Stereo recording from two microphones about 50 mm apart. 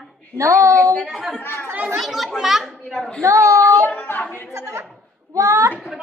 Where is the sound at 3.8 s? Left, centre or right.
Left.